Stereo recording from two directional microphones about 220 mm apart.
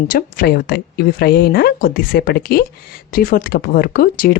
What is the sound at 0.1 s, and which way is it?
Speech, 40° left (ahead or behind).